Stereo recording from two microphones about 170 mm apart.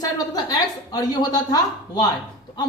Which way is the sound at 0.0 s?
20° left (ahead or behind).